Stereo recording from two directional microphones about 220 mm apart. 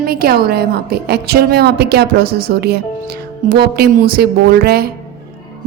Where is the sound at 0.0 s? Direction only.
45° right (ahead or behind).